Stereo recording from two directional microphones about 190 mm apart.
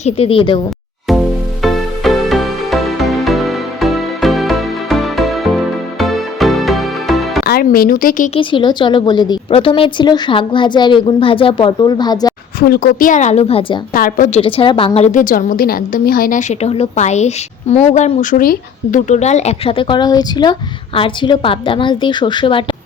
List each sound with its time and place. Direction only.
0.0 s speech: 30° left (ahead or behind)
1.6 s music: centre (ahead or behind)
7.4 s speech: 50° left (ahead or behind)
8.4 s speech: 25° left (ahead or behind)
12.5 s a woman's voice: 50° left (ahead or behind); by 13.7 s 30° left (ahead or behind)
13.9 s a woman's voice: 45° left (ahead or behind); by 22.6 s 25° left (ahead or behind)